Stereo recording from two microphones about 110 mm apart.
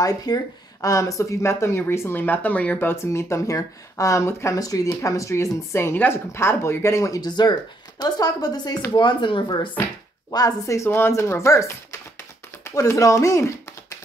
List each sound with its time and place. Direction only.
0.0 s a woman's voice: 35° left (ahead or behind)
10.3 s speech: 35° left (ahead or behind)